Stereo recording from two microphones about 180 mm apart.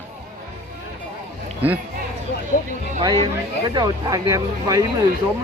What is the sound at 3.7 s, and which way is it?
Speech, 25° right (ahead or behind).